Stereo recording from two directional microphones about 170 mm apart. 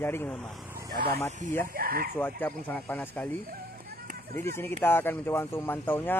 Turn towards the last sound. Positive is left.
turn(degrees=10)  # may be behind; listen again after turning